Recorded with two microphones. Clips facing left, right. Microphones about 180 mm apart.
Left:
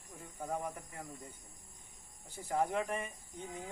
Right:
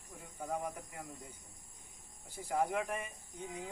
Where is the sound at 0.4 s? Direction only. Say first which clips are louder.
Even; centre (ahead or behind).